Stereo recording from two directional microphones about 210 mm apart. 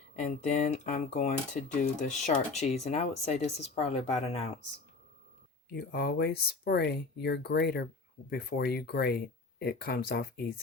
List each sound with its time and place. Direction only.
0.2 s speech: 35° left (ahead or behind)
5.7 s speech: 50° left (ahead or behind)